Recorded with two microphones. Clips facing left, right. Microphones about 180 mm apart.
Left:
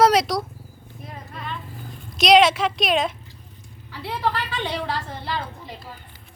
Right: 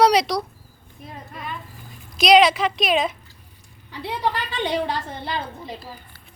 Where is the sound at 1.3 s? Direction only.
10° right (ahead or behind).